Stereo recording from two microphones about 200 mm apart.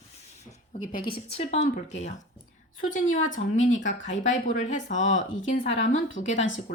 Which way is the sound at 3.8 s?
35° left (ahead or behind).